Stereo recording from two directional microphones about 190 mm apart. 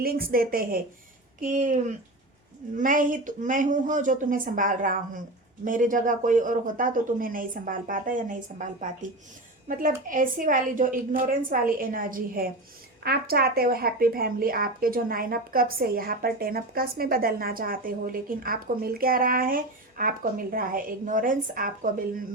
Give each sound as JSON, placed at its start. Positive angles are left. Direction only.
{"t": 0.0, "sound": "speech", "side_deg": -50}